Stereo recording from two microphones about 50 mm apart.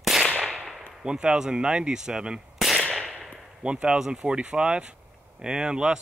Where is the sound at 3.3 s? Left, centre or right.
Right.